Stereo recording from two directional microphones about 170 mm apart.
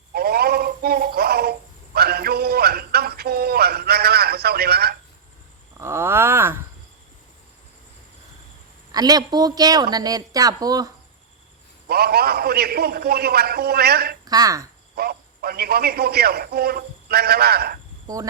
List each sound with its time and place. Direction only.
0.1 s a sound: 65° right (ahead or behind)
5.8 s a sound: 15° right (ahead or behind)
8.9 s speech: 20° right (ahead or behind)
11.9 s a man's voice: 65° right (ahead or behind)
14.3 s speech: 20° right (ahead or behind)
14.9 s a man's voice: 65° right (ahead or behind)